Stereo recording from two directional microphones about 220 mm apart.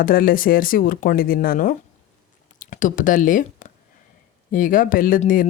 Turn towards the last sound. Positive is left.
turn(degrees=40)  # may be behind; listen again after turning